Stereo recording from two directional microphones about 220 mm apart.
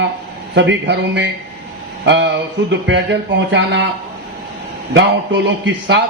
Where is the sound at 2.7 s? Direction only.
55° right (ahead or behind).